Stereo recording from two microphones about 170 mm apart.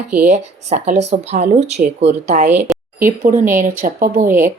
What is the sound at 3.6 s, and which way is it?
Speech, 50° right (ahead or behind).